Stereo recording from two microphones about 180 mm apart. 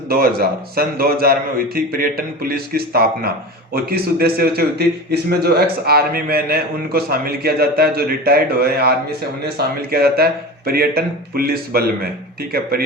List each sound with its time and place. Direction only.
0.1 s a man's voice: 55° right (ahead or behind)